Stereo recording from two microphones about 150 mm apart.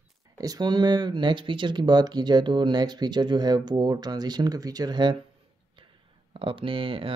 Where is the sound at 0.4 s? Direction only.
25° right (ahead or behind).